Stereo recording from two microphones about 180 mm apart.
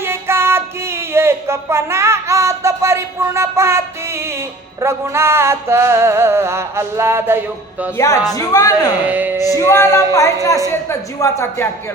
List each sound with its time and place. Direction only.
0.0 s music: 15° right (ahead or behind)
7.9 s speech: 20° left (ahead or behind)
9.0 s speech: 10° right (ahead or behind)
9.6 s speech: 15° left (ahead or behind)